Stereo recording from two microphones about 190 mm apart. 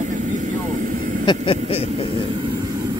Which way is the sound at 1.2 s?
25° left (ahead or behind).